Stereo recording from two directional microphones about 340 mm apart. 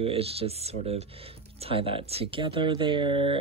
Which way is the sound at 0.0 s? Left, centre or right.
Centre.